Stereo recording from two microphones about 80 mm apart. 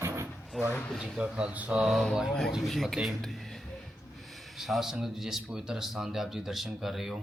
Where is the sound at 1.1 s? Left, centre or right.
Centre.